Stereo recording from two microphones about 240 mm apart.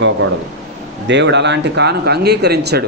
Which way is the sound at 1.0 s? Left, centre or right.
Right.